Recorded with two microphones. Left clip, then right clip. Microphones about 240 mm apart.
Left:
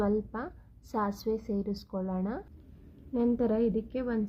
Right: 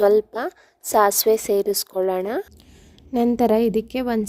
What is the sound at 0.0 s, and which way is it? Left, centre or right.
A woman's voice, right.